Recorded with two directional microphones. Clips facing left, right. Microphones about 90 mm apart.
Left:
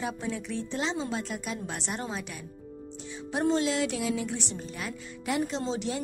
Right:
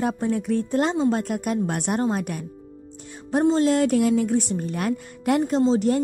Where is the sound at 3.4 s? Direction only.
40° right (ahead or behind).